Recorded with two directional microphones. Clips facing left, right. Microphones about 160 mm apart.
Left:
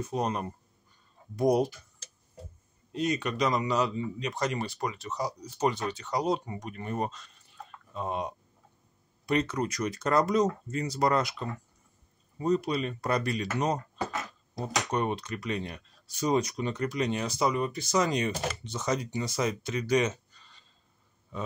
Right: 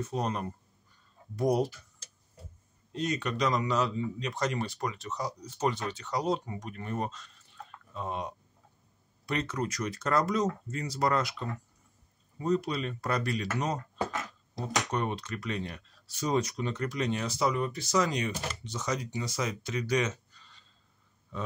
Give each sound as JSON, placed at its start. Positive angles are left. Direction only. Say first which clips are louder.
{"t": 0.0, "sound": "speech", "louder": "left 2 dB", "side_deg": 15}
{"t": 2.9, "sound": "speech", "louder": "left 2 dB", "side_deg": 10}
{"t": 14.9, "sound": "speech", "louder": "left 2 dB", "side_deg": 15}